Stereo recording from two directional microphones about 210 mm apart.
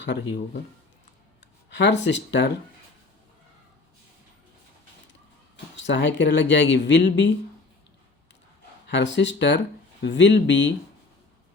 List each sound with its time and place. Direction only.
0.0 s speech: 55° left (ahead or behind)
1.7 s speech: 55° left (ahead or behind)
5.7 s speech: 60° left (ahead or behind)
8.9 s speech: 60° left (ahead or behind)